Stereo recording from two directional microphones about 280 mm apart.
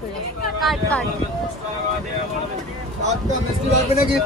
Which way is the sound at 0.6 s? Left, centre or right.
Centre.